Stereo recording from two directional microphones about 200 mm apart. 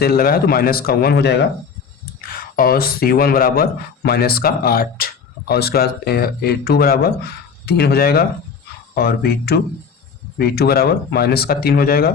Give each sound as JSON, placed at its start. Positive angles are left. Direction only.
{"t": 0.0, "sound": "speech", "side_deg": 45}
{"t": 2.2, "sound": "speech", "side_deg": 45}